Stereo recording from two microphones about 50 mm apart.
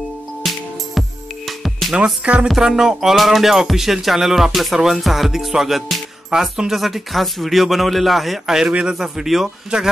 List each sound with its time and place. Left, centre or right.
0.4 s music: centre
2.4 s speech: centre